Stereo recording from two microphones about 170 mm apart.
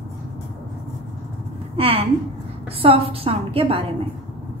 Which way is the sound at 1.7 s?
35° right (ahead or behind).